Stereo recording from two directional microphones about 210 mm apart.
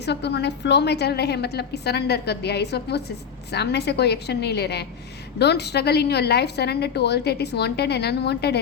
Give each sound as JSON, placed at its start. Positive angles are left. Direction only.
{"t": 0.0, "sound": "a woman's voice", "side_deg": 55}